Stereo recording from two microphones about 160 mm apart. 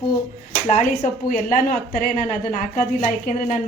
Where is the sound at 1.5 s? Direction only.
55° left (ahead or behind).